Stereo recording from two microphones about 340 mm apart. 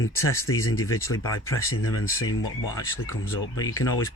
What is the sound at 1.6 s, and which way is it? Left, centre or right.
Speech, left.